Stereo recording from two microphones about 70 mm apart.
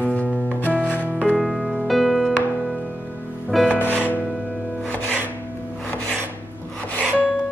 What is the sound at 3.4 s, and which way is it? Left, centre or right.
Music, centre.